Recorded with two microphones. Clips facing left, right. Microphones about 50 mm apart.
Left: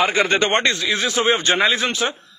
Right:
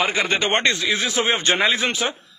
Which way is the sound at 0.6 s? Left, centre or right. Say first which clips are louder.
Left 1 dB; right.